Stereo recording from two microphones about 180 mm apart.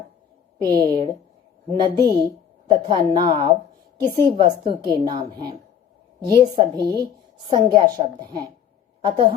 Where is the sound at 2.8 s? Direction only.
25° right (ahead or behind).